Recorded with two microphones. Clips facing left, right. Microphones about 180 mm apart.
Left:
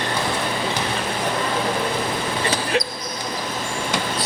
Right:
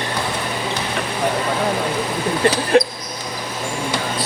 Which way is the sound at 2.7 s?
50° right (ahead or behind).